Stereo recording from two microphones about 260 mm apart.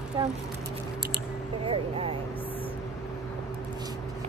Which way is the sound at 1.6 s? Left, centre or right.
Right.